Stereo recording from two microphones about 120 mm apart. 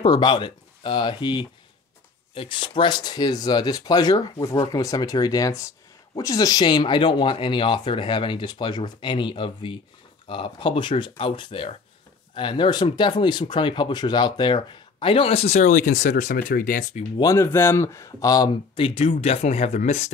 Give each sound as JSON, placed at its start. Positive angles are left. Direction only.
{"t": 0.0, "sound": "speech", "side_deg": 40}
{"t": 17.2, "sound": "speech", "side_deg": 25}
{"t": 18.8, "sound": "speech", "side_deg": 50}